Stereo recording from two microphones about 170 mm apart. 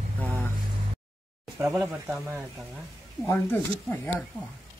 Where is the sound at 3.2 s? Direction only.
15° left (ahead or behind).